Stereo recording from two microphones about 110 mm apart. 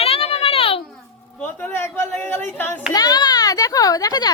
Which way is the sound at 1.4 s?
20° left (ahead or behind).